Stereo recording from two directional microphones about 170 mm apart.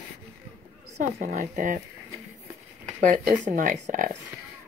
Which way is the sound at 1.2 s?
50° right (ahead or behind).